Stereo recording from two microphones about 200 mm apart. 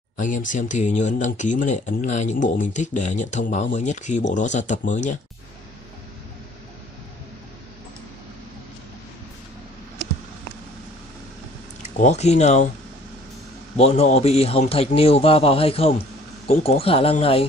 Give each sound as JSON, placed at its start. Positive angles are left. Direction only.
{"t": 0.2, "sound": "speech", "side_deg": 40}
{"t": 11.8, "sound": "speech", "side_deg": 35}
{"t": 13.7, "sound": "a man's voice", "side_deg": 30}